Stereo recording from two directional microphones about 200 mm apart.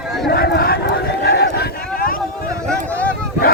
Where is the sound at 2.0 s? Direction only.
45° left (ahead or behind).